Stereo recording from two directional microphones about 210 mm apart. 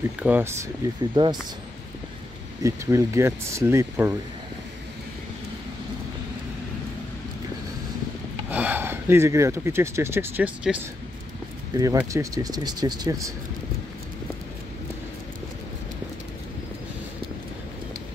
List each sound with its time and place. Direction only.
0.2 s speech: 10° right (ahead or behind)
1.1 s speech: 20° right (ahead or behind)
2.6 s speech: 15° right (ahead or behind)
8.5 s speech: 10° right (ahead or behind)